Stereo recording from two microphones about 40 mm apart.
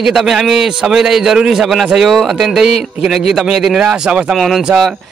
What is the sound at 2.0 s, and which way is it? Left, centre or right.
Speech, centre.